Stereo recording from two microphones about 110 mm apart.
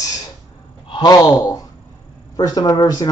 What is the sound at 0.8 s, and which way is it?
A man's voice, 40° left (ahead or behind).